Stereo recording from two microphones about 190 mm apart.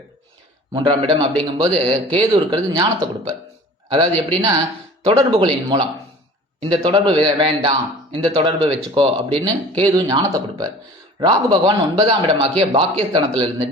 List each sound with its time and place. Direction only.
0.7 s speech: 25° right (ahead or behind)